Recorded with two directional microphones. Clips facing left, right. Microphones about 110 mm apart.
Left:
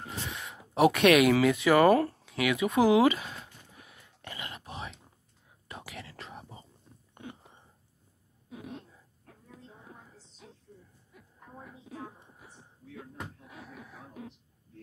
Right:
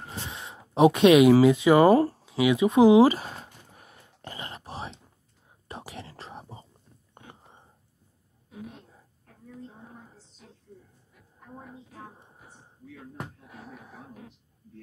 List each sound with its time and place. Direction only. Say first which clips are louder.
0.2 s speech: even; 25° right (ahead or behind)
3.1 s whispering: right 2 dB; 40° right (ahead or behind)
13.6 s a sound: right 3 dB; 35° right (ahead or behind)